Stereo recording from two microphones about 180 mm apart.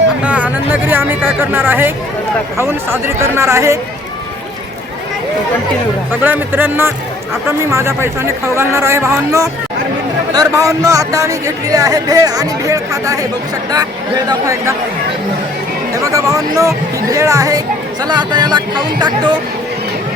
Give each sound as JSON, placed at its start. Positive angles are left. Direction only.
{"t": 0.2, "sound": "speech", "side_deg": -10}
{"t": 6.1, "sound": "speech", "side_deg": -10}
{"t": 14.3, "sound": "speech", "side_deg": -20}
{"t": 16.0, "sound": "speech", "side_deg": -20}